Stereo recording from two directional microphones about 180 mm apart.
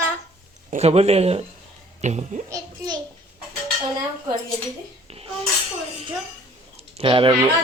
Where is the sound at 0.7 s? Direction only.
35° right (ahead or behind).